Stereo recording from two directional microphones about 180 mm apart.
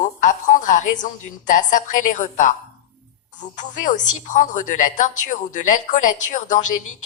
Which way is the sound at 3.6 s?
45° left (ahead or behind).